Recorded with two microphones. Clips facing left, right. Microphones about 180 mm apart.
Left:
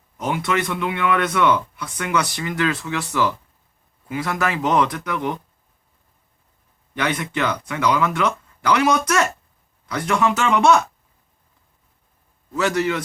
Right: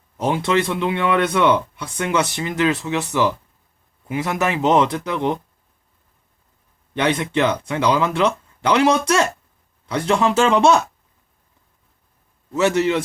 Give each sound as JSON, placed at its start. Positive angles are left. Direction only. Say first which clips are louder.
{"t": 0.2, "sound": "speech", "louder": "right 4 dB", "side_deg": -30}
{"t": 6.9, "sound": "speech", "louder": "right 4 dB", "side_deg": -25}
{"t": 12.5, "sound": "speech", "louder": "right 3 dB", "side_deg": -20}